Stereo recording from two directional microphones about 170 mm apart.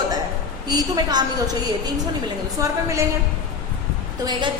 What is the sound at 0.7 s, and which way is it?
Speech, 25° right (ahead or behind).